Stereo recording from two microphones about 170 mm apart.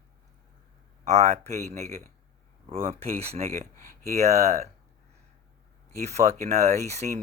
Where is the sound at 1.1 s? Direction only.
40° right (ahead or behind).